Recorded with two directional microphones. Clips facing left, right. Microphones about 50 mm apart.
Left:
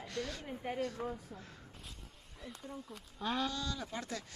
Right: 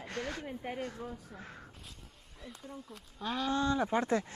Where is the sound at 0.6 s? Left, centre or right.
Centre.